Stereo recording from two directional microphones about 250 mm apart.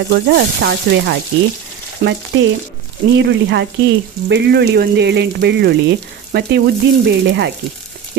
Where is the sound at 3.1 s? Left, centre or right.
Right.